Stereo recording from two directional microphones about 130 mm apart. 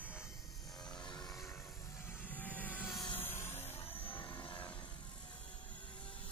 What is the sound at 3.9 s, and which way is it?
Vehicle, 45° left (ahead or behind).